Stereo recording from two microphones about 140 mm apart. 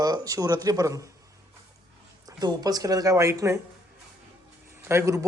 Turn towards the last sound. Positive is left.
turn(degrees=-20)  # may be behind; listen again after turning